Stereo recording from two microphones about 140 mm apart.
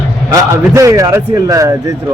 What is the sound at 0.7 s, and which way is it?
Speech, 25° right (ahead or behind).